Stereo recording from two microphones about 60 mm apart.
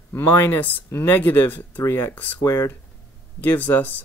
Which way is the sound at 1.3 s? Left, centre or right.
Left.